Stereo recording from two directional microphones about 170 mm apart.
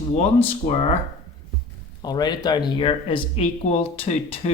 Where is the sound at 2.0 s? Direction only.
25° left (ahead or behind).